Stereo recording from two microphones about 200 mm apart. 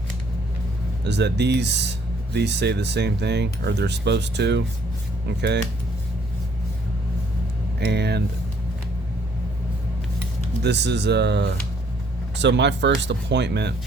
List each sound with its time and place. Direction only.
1.0 s speech: 60° right (ahead or behind)
7.8 s speech: 55° right (ahead or behind)
10.6 s speech: 60° right (ahead or behind)